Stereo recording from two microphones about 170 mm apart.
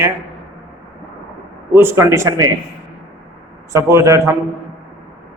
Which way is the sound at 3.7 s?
15° right (ahead or behind).